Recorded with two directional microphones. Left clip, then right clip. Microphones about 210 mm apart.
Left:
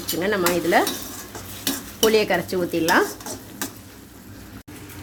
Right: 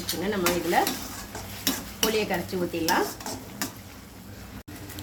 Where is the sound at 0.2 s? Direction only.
55° left (ahead or behind).